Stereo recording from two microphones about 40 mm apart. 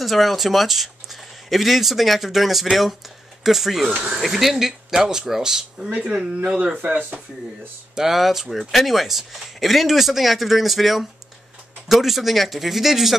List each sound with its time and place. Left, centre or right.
0.0 s speech: centre
5.8 s speech: right
7.9 s speech: centre